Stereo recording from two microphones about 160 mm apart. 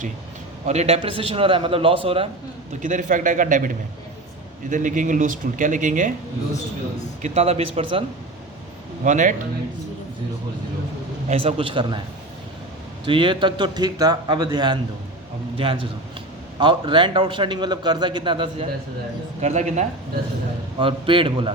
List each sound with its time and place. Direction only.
0.6 s a man's voice: 45° right (ahead or behind)
2.8 s speech: 55° right (ahead or behind)
4.7 s speech: 55° right (ahead or behind)
7.2 s a man's voice: 40° right (ahead or behind)
9.0 s speech: 50° right (ahead or behind)
11.3 s a man's voice: 35° right (ahead or behind)
13.1 s a man's voice: 30° right (ahead or behind)
19.4 s speech: 45° right (ahead or behind)
20.7 s a man's voice: 35° right (ahead or behind)